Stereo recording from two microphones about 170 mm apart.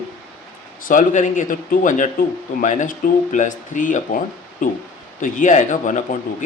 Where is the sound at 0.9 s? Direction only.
50° left (ahead or behind).